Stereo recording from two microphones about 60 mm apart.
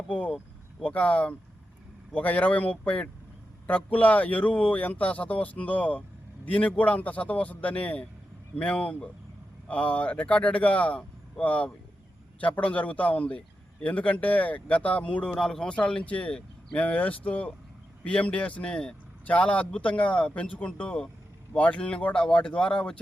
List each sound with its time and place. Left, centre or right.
0.1 s vehicle: centre
0.8 s speech: left
15.3 s speech: centre
15.7 s speech: centre